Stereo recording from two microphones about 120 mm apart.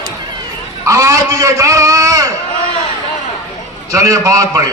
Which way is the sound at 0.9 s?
25° right (ahead or behind).